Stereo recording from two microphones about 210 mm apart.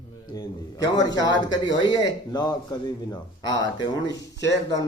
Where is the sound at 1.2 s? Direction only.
20° left (ahead or behind).